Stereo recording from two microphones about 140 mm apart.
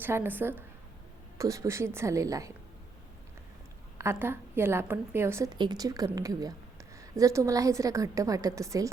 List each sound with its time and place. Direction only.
0.0 s a woman's voice: 15° right (ahead or behind)
3.9 s a woman's voice: 20° right (ahead or behind)
5.5 s a woman's voice: 30° right (ahead or behind)